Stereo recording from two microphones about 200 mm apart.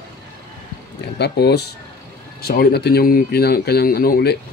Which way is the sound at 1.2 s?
55° left (ahead or behind).